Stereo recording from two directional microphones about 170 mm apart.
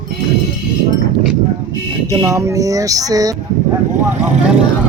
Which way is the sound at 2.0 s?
20° right (ahead or behind).